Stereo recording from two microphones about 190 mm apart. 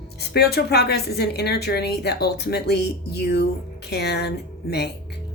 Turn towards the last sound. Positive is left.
turn(degrees=60)  # may be behind; listen again after turning